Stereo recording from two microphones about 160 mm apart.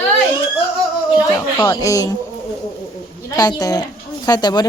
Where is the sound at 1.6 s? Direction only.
20° left (ahead or behind).